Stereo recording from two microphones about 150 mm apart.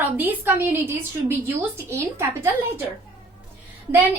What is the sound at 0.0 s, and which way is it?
A woman's voice, 10° right (ahead or behind).